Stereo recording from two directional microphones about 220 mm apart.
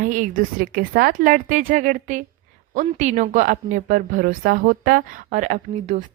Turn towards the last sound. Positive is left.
turn(degrees=-35)  # may be behind; listen again after turning